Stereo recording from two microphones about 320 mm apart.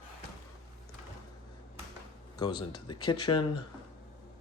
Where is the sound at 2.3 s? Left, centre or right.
Centre.